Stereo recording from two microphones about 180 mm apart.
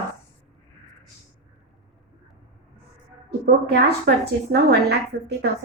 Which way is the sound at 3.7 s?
65° right (ahead or behind).